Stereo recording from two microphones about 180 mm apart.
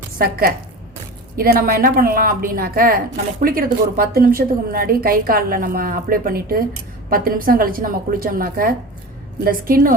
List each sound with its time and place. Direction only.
0.2 s a woman's voice: 55° right (ahead or behind)